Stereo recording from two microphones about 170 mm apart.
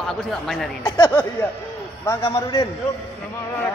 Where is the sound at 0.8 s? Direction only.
25° left (ahead or behind).